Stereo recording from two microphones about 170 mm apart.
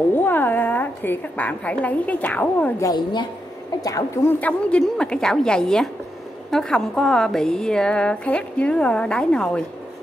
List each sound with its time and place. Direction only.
0.1 s a woman's voice: 10° left (ahead or behind)
2.9 s a woman's voice: 25° left (ahead or behind); by 9.6 s 5° left (ahead or behind)